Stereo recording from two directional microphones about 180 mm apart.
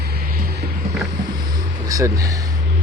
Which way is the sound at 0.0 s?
60° right (ahead or behind).